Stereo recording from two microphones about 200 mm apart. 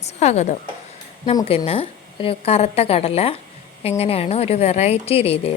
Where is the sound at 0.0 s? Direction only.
35° left (ahead or behind).